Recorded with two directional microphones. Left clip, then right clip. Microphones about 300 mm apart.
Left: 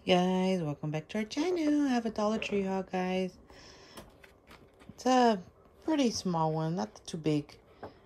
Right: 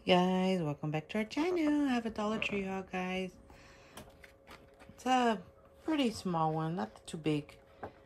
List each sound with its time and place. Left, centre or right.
0.0 s speech: centre
4.5 s a sound: centre
5.9 s speech: centre